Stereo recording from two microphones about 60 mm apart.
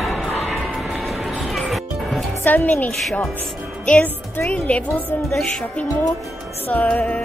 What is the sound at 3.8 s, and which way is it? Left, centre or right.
Speech, centre.